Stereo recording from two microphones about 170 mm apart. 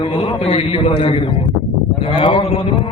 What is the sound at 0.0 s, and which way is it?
A man's voice, 35° left (ahead or behind).